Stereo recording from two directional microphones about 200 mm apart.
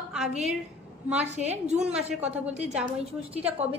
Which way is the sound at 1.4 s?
Centre (ahead or behind).